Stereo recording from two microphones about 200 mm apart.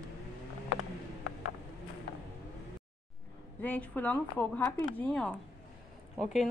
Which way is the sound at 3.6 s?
10° left (ahead or behind).